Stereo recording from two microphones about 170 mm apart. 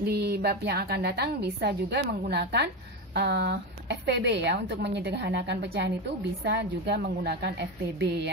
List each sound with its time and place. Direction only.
0.0 s a woman's voice: 75° right (ahead or behind)
6.4 s a woman's voice: 75° right (ahead or behind)